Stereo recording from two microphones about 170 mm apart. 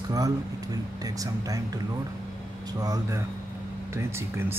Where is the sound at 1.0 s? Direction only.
20° right (ahead or behind).